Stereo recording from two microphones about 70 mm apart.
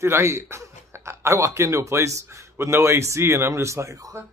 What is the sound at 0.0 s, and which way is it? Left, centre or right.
A man's voice, right.